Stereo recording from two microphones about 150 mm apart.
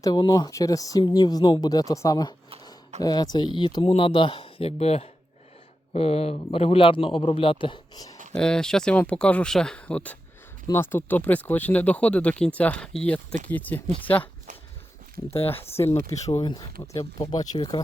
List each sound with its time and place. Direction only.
0.0 s a man's voice: 25° left (ahead or behind)
8.4 s speech: 5° left (ahead or behind)
15.5 s speech: 40° left (ahead or behind)
15.9 s speech: 20° left (ahead or behind)